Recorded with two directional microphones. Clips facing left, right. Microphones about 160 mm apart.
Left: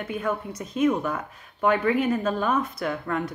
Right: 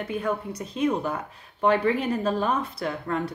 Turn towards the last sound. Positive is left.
turn(degrees=-30)  # may be behind; listen again after turning